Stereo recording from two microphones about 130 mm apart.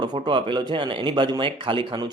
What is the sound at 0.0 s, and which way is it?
Speech, 35° right (ahead or behind).